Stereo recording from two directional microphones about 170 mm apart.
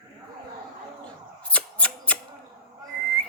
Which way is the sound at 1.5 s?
5° left (ahead or behind).